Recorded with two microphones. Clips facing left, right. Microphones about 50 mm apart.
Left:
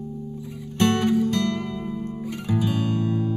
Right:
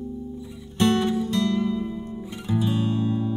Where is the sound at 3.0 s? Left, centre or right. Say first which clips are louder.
Even; left.